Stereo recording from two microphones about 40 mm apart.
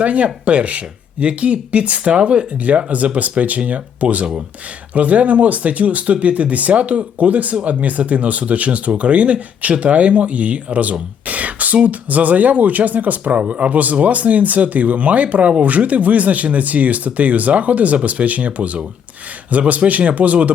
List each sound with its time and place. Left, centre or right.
0.0 s speech: right
13.4 s speech: right